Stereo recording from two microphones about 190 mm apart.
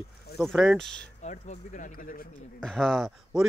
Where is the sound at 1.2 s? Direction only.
35° left (ahead or behind).